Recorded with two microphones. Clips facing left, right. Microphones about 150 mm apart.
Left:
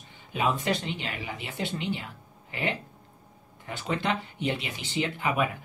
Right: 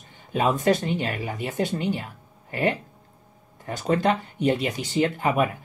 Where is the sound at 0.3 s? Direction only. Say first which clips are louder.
Right 6 dB; 45° right (ahead or behind).